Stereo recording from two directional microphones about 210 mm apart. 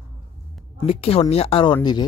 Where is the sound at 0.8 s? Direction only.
25° left (ahead or behind).